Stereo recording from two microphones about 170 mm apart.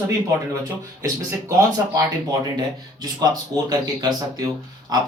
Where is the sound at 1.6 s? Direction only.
20° right (ahead or behind).